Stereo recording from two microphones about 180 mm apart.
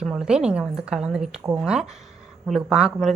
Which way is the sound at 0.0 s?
5° right (ahead or behind).